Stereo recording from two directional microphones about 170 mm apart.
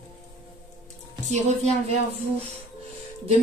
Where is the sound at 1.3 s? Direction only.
40° right (ahead or behind).